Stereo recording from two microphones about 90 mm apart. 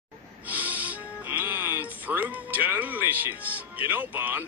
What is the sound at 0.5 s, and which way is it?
Speech, 20° right (ahead or behind).